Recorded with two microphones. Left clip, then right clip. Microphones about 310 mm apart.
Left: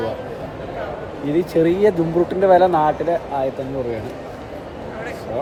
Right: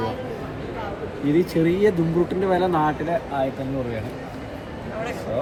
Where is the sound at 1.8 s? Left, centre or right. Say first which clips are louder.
Left 4 dB; centre.